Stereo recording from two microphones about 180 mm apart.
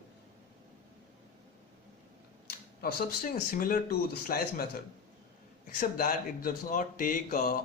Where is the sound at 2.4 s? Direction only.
60° left (ahead or behind).